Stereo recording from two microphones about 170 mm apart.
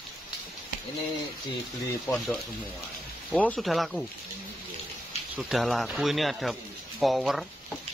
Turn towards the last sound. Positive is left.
turn(degrees=0)  # may be behind; listen again after turning